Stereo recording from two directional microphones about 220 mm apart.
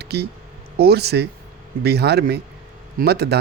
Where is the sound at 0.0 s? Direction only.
50° right (ahead or behind).